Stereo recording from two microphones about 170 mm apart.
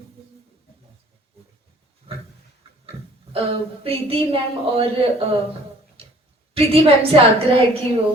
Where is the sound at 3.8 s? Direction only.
35° right (ahead or behind).